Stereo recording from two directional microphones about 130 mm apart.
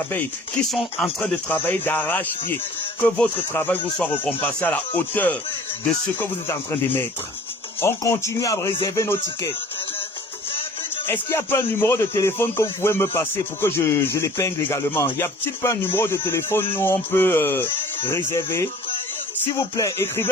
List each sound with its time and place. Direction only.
0.7 s speech: 5° left (ahead or behind); by 9.5 s 25° left (ahead or behind)
11.0 s speech: 20° left (ahead or behind)